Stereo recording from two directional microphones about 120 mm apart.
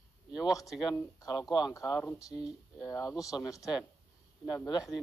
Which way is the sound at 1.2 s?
35° left (ahead or behind).